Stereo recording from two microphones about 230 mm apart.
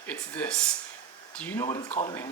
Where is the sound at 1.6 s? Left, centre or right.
Left.